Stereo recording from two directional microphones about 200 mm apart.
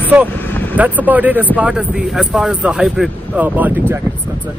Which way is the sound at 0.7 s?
10° right (ahead or behind).